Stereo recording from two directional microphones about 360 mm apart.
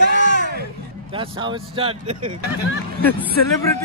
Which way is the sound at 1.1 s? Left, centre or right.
Centre.